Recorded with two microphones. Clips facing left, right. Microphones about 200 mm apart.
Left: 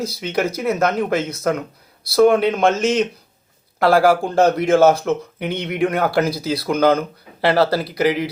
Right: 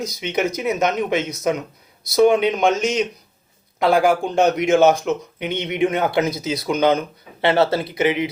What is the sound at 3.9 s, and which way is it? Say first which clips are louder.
Speech: left 2 dB; 5° left (ahead or behind).